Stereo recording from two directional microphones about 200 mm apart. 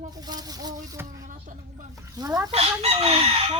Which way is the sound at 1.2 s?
40° right (ahead or behind).